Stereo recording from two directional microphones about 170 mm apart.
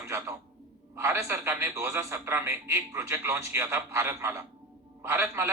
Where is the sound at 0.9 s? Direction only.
15° right (ahead or behind).